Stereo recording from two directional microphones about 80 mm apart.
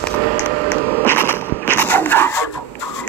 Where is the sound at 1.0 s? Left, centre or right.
Left.